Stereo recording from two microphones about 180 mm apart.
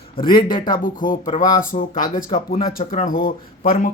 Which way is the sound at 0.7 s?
50° left (ahead or behind).